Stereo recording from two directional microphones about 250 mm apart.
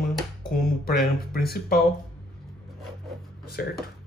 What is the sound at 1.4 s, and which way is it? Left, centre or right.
Speech, left.